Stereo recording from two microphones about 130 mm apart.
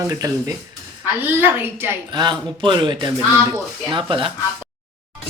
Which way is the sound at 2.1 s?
35° right (ahead or behind).